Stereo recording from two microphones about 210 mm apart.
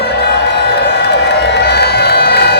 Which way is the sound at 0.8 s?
55° left (ahead or behind).